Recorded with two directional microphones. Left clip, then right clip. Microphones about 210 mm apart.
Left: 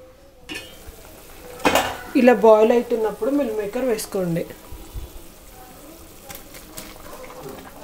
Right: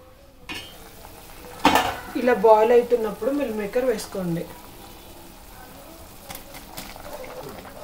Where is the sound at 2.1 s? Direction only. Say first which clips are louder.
Left 8 dB; 45° left (ahead or behind).